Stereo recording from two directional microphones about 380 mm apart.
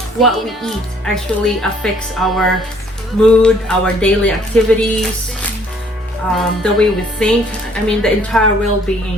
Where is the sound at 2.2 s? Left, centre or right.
Centre.